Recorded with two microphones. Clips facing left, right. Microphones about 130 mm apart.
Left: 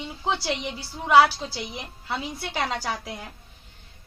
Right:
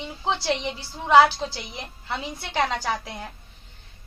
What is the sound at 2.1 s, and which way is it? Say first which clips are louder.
A woman's voice: left 1 dB; 5° left (ahead or behind).